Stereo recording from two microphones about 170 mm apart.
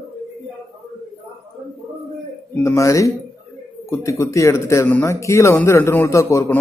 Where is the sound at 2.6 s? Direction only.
15° left (ahead or behind).